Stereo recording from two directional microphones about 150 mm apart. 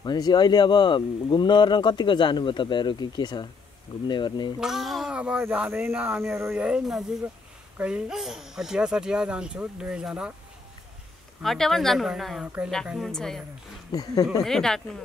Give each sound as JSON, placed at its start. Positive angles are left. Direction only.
{"t": 0.0, "sound": "speech", "side_deg": 30}
{"t": 4.6, "sound": "speech", "side_deg": 0}
{"t": 11.4, "sound": "speech", "side_deg": 0}
{"t": 13.9, "sound": "speech", "side_deg": 25}
{"t": 14.4, "sound": "speech", "side_deg": 5}